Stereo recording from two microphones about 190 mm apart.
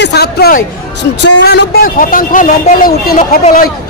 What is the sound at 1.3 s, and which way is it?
Speech, 65° left (ahead or behind).